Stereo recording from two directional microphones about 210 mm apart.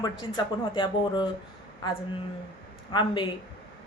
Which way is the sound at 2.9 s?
20° left (ahead or behind).